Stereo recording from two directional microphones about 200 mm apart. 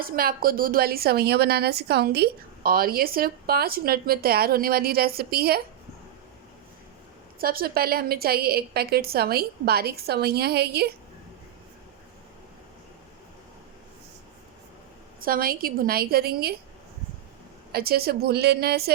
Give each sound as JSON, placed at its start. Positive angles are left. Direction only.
{"t": 0.0, "sound": "a woman's voice", "side_deg": -45}
{"t": 7.3, "sound": "a woman's voice", "side_deg": -45}
{"t": 15.2, "sound": "a woman's voice", "side_deg": -45}
{"t": 17.7, "sound": "a woman's voice", "side_deg": -50}